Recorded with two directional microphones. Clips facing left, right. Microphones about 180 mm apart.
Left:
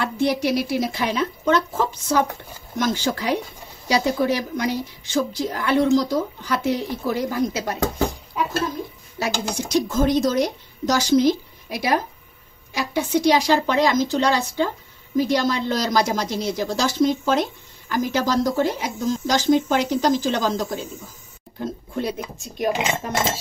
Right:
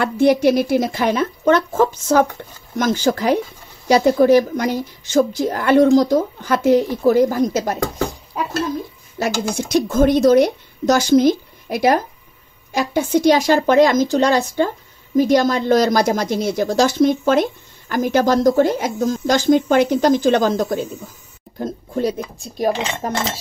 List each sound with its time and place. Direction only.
0.0 s a woman's voice: 50° right (ahead or behind)
9.2 s a woman's voice: 55° right (ahead or behind)
21.5 s speech: 40° right (ahead or behind)